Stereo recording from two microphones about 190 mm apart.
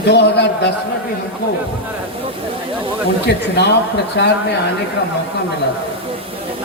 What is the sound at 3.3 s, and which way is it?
Speech, 60° left (ahead or behind).